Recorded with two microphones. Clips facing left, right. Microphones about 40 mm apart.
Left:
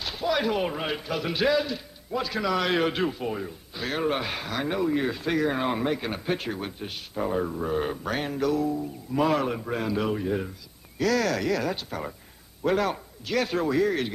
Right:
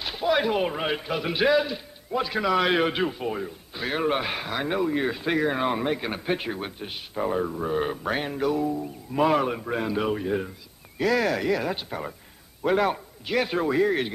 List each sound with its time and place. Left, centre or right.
0.0 s a man's voice: centre